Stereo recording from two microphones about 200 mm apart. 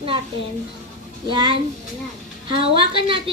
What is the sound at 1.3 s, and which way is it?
Speech, 25° right (ahead or behind).